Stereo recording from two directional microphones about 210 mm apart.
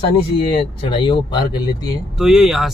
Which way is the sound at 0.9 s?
25° left (ahead or behind).